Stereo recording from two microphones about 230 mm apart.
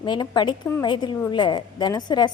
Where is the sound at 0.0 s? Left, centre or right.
Centre.